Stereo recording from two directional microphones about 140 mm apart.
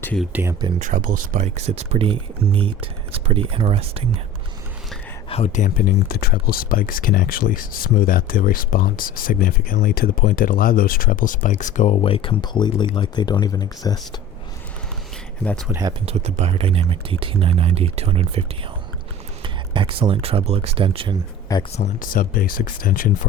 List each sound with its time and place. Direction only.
0.3 s speech: 15° right (ahead or behind)
0.8 s speech: 65° right (ahead or behind); by 4.0 s 45° right (ahead or behind)
5.3 s speech: 55° left (ahead or behind); by 14.2 s 30° left (ahead or behind)
16.0 s speech: 50° right (ahead or behind)
19.4 s speech: 35° right (ahead or behind)
21.5 s speech: 25° left (ahead or behind)
22.1 s speech: 90° left